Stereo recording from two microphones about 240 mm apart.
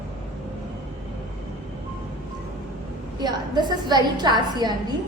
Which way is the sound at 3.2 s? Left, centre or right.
Centre.